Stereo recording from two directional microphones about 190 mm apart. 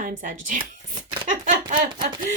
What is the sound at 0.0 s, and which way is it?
Speech, 45° right (ahead or behind).